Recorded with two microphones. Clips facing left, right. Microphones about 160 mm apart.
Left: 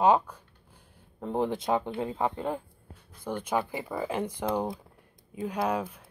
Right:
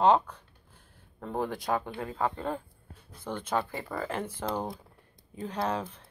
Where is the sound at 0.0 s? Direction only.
10° left (ahead or behind).